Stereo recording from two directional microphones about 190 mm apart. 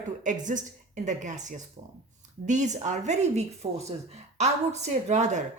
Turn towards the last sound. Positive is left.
turn(degrees=-40)  # may be behind; listen again after turning